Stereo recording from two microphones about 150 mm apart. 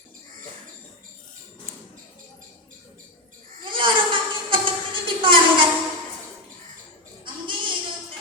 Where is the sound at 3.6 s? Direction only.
35° right (ahead or behind).